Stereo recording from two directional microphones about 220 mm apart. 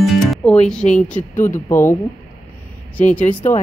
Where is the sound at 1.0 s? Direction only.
10° left (ahead or behind).